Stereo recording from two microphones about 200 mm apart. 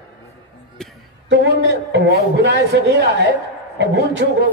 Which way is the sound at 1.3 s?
60° right (ahead or behind).